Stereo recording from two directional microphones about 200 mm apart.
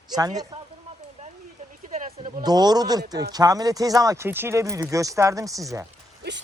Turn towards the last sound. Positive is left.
turn(degrees=-15)  # may be behind; listen again after turning